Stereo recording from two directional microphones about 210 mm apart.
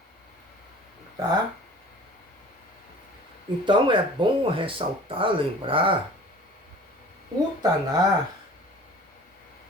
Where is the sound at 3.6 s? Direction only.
20° right (ahead or behind).